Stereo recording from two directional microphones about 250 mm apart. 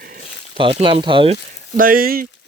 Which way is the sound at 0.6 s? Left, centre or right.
Right.